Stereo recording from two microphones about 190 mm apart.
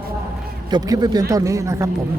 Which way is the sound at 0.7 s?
20° right (ahead or behind).